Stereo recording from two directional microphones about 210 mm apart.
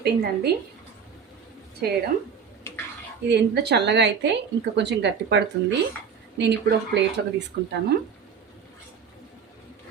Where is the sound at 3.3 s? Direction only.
50° right (ahead or behind).